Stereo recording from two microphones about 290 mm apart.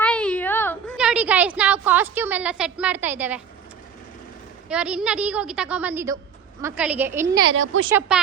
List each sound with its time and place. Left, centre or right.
0.0 s a sound: centre
0.9 s a woman's voice: centre
4.7 s a woman's voice: centre
7.5 s a woman's voice: right
7.9 s a woman's voice: centre